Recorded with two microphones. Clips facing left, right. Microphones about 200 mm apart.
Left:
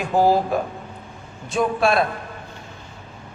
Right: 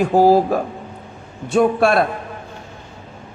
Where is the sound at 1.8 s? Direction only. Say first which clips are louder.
Right 3 dB; 65° right (ahead or behind).